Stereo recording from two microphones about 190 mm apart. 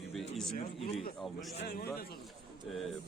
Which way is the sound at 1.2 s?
Centre (ahead or behind).